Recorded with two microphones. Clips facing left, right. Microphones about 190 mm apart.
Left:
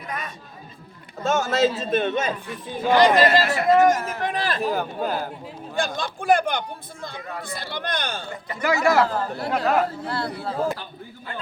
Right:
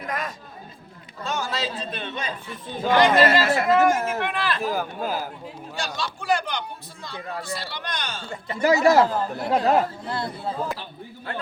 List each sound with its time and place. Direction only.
1.2 s speech: 45° left (ahead or behind)
4.6 s speech: centre (ahead or behind)
5.7 s speech: 55° left (ahead or behind)
8.3 s speech: 30° right (ahead or behind)
9.0 s speech: 20° right (ahead or behind)